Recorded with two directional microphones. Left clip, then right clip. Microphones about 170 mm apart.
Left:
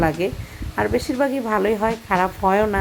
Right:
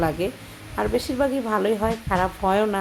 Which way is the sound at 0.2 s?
15° left (ahead or behind).